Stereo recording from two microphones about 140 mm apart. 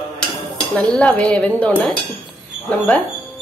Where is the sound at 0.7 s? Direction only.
10° left (ahead or behind).